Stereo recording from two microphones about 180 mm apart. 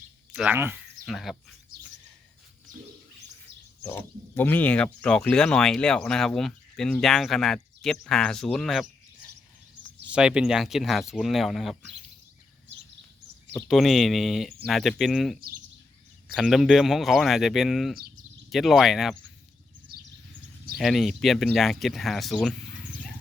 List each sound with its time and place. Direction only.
0.3 s speech: 10° right (ahead or behind)
1.0 s speech: centre (ahead or behind)
4.4 s speech: 10° left (ahead or behind)
10.0 s speech: 5° right (ahead or behind)
13.7 s speech: centre (ahead or behind)
15.4 s speech: 55° right (ahead or behind)
16.3 s speech: centre (ahead or behind)
19.9 s bird vocalization: 60° right (ahead or behind)
20.7 s speech: centre (ahead or behind)